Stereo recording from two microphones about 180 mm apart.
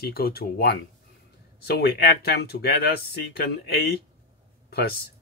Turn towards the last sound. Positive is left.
turn(degrees=60)  # may be behind; listen again after turning